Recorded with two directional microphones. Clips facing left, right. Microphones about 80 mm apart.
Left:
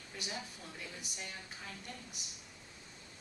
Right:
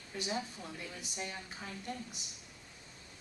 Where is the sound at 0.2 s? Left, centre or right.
Right.